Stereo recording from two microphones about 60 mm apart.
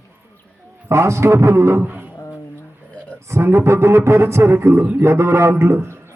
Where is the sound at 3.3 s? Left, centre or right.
Right.